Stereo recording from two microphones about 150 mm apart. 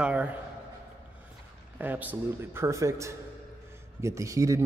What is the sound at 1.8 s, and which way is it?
A man's voice, 10° right (ahead or behind).